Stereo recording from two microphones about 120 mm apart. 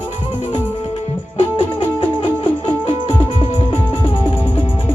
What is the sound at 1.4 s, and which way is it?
Music, 45° left (ahead or behind).